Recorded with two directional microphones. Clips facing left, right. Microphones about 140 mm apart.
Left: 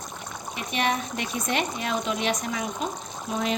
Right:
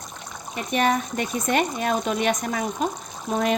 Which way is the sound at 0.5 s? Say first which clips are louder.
Right 5 dB; 45° right (ahead or behind).